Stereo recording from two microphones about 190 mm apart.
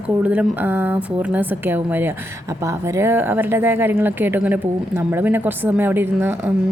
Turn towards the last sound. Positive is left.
turn(degrees=-10)  # may be behind; listen again after turning